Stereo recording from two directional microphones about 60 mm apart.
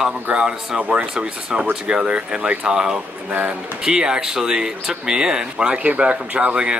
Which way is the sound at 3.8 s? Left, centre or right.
Centre.